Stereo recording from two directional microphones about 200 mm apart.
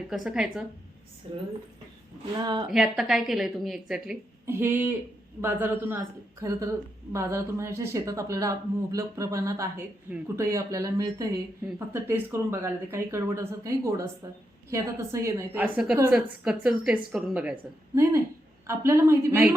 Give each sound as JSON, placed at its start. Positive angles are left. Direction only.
{"t": 0.1, "sound": "a woman's voice", "side_deg": -5}
{"t": 2.4, "sound": "speech", "side_deg": -20}
{"t": 2.6, "sound": "a woman's voice", "side_deg": 0}